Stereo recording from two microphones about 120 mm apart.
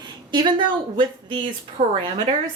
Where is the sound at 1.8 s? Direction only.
65° right (ahead or behind).